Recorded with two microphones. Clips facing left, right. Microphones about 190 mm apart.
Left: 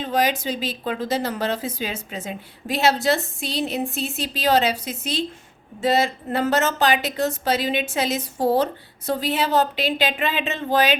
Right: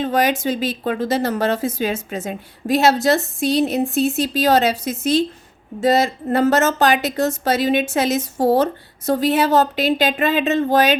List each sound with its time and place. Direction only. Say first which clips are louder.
0.0 s speech: right 4 dB; 50° right (ahead or behind)